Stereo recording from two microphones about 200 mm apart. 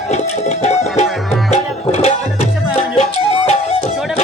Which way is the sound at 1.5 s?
35° left (ahead or behind).